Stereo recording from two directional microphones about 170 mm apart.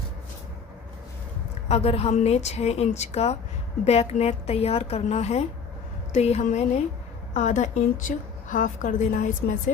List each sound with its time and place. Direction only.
1.6 s a woman's voice: 35° left (ahead or behind)